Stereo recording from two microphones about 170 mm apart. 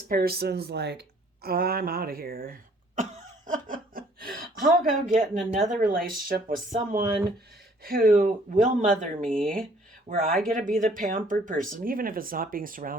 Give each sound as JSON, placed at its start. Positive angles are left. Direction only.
{"t": 0.1, "sound": "a sound", "side_deg": -65}
{"t": 5.0, "sound": "speech", "side_deg": -50}
{"t": 9.2, "sound": "speech", "side_deg": 5}
{"t": 10.1, "sound": "speech", "side_deg": -55}